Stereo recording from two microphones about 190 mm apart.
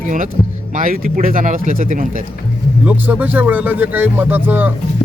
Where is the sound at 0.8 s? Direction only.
45° right (ahead or behind).